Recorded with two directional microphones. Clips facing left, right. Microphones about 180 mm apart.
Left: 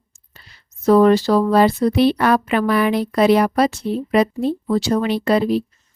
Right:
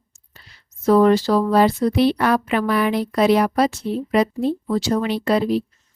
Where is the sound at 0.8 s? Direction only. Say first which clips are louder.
Left 2 dB; 65° left (ahead or behind).